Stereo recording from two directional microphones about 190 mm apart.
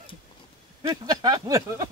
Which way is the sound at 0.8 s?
20° right (ahead or behind).